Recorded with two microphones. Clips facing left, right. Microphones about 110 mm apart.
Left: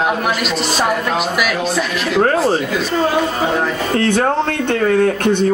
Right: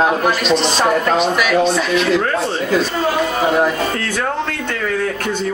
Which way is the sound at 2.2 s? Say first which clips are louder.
Left 4 dB; 40° left (ahead or behind).